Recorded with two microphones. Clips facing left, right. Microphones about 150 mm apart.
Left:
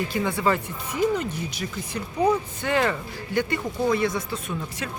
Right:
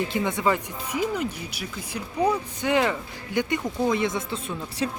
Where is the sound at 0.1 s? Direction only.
20° right (ahead or behind).